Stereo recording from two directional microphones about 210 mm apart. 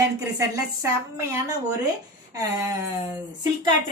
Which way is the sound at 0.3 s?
15° right (ahead or behind).